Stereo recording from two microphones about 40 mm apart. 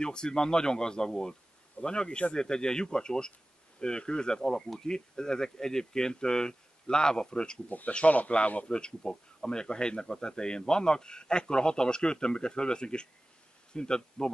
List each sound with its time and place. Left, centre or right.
0.0 s speech: left
7.6 s speech: left
8.3 s a man's voice: left
8.6 s speech: left